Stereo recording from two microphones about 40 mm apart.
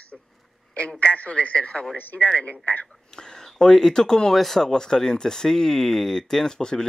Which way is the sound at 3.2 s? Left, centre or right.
Centre.